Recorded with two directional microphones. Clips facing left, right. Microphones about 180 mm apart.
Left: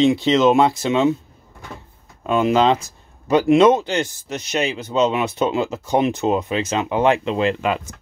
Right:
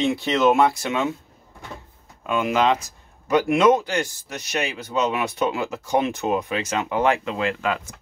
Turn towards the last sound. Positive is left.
turn(degrees=20)  # may be behind; listen again after turning